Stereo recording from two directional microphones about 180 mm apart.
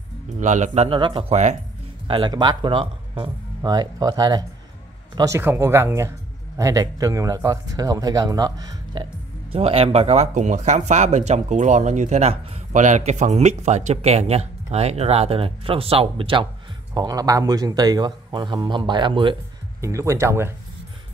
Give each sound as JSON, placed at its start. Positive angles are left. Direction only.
{"t": 0.4, "sound": "speech", "side_deg": -40}
{"t": 9.5, "sound": "speech", "side_deg": -35}
{"t": 19.8, "sound": "speech", "side_deg": -15}